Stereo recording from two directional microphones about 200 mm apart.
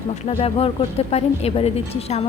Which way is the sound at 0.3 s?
30° left (ahead or behind).